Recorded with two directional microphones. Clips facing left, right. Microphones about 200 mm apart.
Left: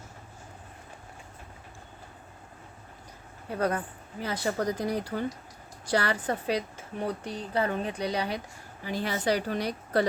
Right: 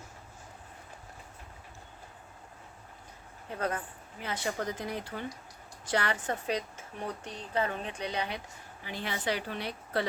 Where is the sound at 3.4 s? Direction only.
35° left (ahead or behind).